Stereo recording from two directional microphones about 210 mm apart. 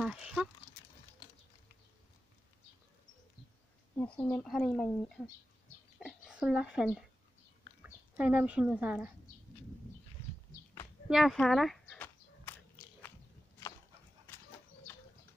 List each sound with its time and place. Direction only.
0.0 s speech: centre (ahead or behind)
3.9 s speech: 10° left (ahead or behind)
5.9 s a sound: centre (ahead or behind)
7.8 s speech: 10° right (ahead or behind)
10.5 s horse: 15° left (ahead or behind)
11.1 s a sound: centre (ahead or behind)